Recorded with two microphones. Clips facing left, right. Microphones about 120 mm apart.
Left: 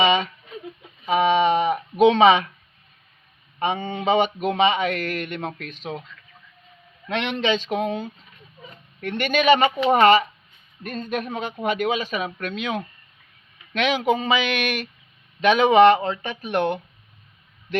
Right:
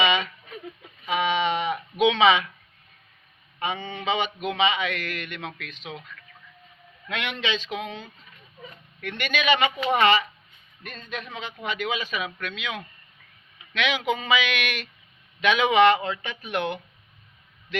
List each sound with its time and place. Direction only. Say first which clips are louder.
0.0 s a sound: left 4 dB; 35° left (ahead or behind)
1.0 s speech: left 6 dB; 40° left (ahead or behind)
3.6 s speech: left 6 dB; 45° left (ahead or behind)
7.1 s speech: left 6 dB; 30° left (ahead or behind)
7.5 s speech: left 7 dB; 45° left (ahead or behind)